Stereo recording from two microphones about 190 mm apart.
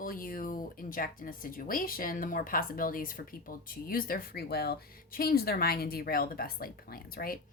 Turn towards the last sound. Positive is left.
turn(degrees=50)  # may be behind; listen again after turning